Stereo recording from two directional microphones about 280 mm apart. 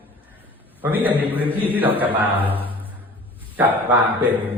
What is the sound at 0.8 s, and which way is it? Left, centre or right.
Speech, centre.